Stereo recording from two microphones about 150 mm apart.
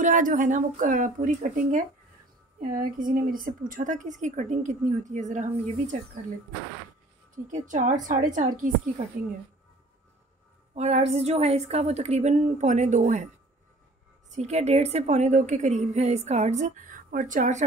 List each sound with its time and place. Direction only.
0.0 s a woman's voice: 60° right (ahead or behind)
2.6 s a woman's voice: 70° right (ahead or behind)
7.3 s a woman's voice: 60° right (ahead or behind)
10.7 s a woman's voice: 45° right (ahead or behind)
14.3 s a woman's voice: 50° right (ahead or behind)